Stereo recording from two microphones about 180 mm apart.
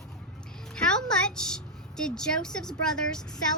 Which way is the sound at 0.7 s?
5° left (ahead or behind).